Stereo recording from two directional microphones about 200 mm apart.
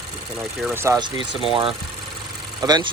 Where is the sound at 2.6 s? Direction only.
20° right (ahead or behind).